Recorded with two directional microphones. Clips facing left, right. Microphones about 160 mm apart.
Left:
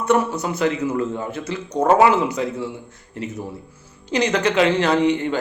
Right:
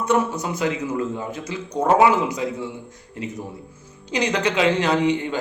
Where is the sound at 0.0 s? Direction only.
10° right (ahead or behind).